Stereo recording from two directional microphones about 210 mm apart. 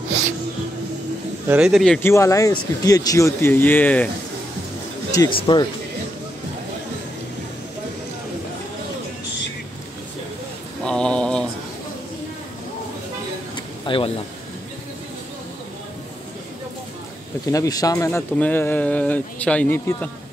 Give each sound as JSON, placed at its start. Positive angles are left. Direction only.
{"t": 1.5, "sound": "speech", "side_deg": -5}
{"t": 2.0, "sound": "speech", "side_deg": 10}
{"t": 5.1, "sound": "speech", "side_deg": 20}
{"t": 10.8, "sound": "mantra", "side_deg": 5}
{"t": 13.8, "sound": "speech", "side_deg": 25}
{"t": 17.5, "sound": "speech", "side_deg": 15}